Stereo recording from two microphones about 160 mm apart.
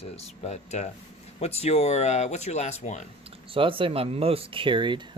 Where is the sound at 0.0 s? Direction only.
40° left (ahead or behind).